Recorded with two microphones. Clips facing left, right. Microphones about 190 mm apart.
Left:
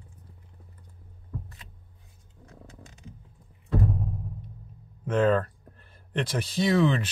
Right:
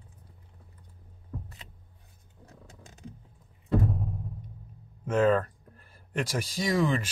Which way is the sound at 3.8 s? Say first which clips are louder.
Left 1 dB; centre (ahead or behind).